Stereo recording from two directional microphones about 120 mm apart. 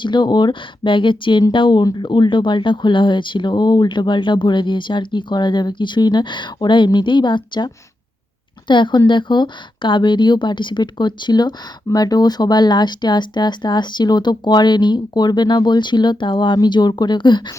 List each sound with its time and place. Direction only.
0.0 s speech: 40° left (ahead or behind)